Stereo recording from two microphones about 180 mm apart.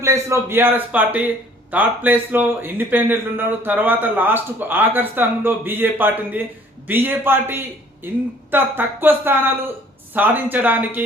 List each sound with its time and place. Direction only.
0.0 s a man's voice: 15° right (ahead or behind)